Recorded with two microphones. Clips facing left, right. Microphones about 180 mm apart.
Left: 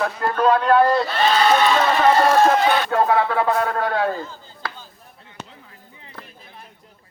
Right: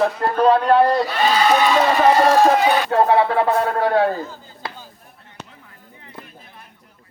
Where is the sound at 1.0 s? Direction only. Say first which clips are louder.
Right 1 dB; 15° right (ahead or behind).